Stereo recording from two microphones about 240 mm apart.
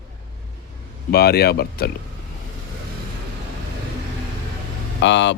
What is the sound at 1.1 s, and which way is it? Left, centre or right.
Speech, left.